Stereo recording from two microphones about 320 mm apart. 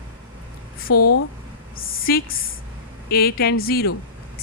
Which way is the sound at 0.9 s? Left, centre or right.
Left.